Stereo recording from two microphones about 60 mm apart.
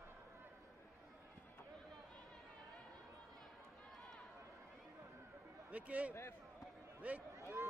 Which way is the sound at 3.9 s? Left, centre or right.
Centre.